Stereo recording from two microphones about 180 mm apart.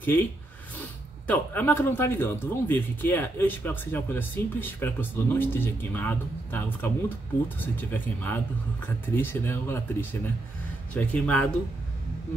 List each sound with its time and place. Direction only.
0.0 s speech: 10° left (ahead or behind)